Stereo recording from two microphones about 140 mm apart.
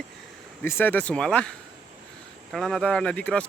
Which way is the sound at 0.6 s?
15° left (ahead or behind).